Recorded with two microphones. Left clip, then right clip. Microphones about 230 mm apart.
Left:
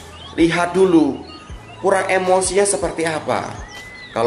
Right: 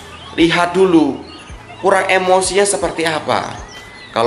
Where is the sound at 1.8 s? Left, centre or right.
Centre.